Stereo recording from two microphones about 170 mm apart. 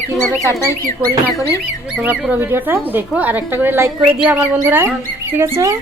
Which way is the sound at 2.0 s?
10° right (ahead or behind).